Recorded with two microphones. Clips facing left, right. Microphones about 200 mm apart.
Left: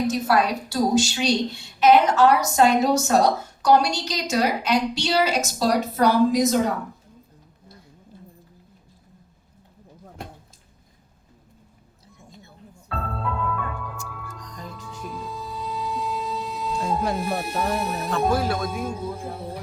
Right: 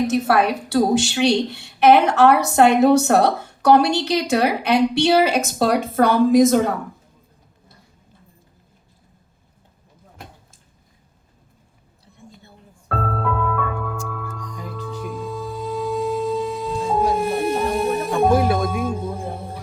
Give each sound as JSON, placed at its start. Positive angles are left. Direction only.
{"t": 0.3, "sound": "a woman's voice", "side_deg": -65}
{"t": 12.9, "sound": "music", "side_deg": -55}
{"t": 14.4, "sound": "music", "side_deg": -10}
{"t": 14.8, "sound": "music", "side_deg": -55}
{"t": 18.3, "sound": "music", "side_deg": -20}
{"t": 18.6, "sound": "music", "side_deg": -50}